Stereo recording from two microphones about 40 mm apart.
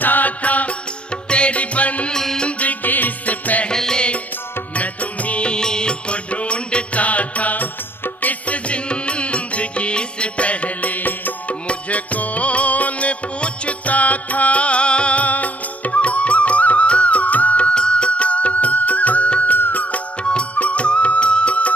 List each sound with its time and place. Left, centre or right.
0.0 s music: left
2.0 s music: centre
2.4 s music: left
3.7 s music: centre
4.7 s music: left
11.6 s music: left
19.5 s music: left